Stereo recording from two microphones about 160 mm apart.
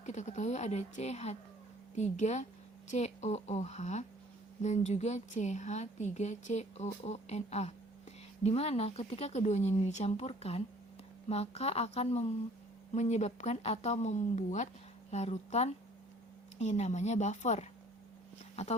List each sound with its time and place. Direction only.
0.0 s speech: 45° left (ahead or behind)